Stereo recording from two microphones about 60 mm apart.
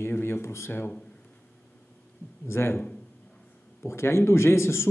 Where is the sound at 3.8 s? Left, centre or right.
Left.